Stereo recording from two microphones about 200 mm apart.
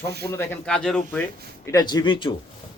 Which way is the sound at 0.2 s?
20° left (ahead or behind).